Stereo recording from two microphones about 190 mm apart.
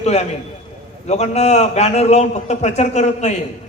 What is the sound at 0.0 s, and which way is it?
A man's voice, 35° left (ahead or behind).